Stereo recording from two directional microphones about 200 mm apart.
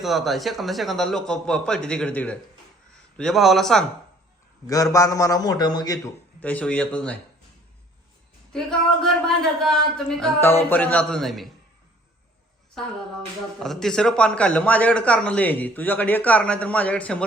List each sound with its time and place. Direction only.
0.0 s speech: centre (ahead or behind)
4.6 s a man's voice: 15° left (ahead or behind)
6.0 s a man's voice: 5° left (ahead or behind)
8.5 s speech: centre (ahead or behind)
12.8 s a man's voice: centre (ahead or behind)